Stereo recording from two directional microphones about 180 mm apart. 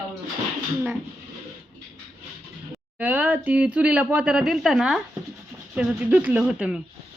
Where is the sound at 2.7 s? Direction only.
10° right (ahead or behind).